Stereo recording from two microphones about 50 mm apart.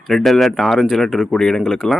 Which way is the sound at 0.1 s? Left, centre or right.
Centre.